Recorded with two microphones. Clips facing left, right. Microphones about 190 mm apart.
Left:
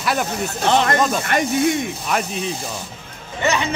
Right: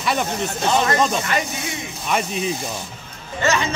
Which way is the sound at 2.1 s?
Centre (ahead or behind).